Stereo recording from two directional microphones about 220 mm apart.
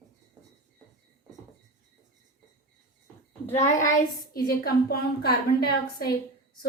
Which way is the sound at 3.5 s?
30° left (ahead or behind).